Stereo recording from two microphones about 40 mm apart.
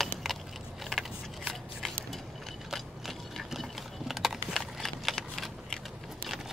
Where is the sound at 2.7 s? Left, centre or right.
Centre.